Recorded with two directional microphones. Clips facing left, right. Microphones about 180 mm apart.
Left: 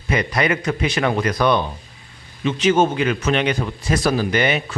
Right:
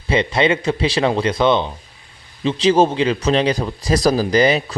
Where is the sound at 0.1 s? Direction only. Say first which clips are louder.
Right 3 dB; 25° right (ahead or behind).